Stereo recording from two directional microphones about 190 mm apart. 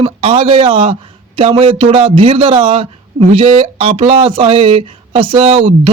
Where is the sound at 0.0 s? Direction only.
30° right (ahead or behind).